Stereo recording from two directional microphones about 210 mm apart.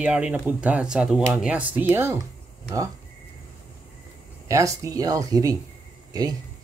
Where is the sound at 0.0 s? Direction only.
5° right (ahead or behind).